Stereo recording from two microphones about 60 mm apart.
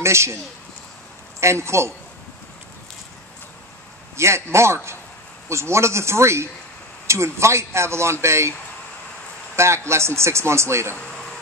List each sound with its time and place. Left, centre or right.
0.0 s a man's voice: right
1.4 s a man's voice: right
4.2 s a man's voice: right
9.6 s a man's voice: right